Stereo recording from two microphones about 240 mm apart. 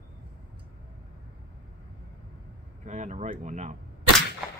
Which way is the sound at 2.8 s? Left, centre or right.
Right.